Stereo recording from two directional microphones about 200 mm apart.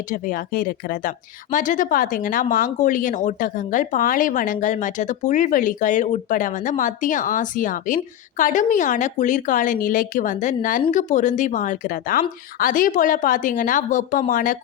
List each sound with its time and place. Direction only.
0.1 s speech: 45° left (ahead or behind)